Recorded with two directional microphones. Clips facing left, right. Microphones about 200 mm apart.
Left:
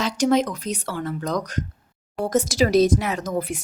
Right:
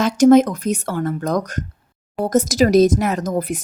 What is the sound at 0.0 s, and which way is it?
Speech, 50° right (ahead or behind).